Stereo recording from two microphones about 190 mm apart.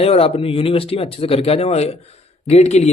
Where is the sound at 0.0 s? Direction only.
30° left (ahead or behind).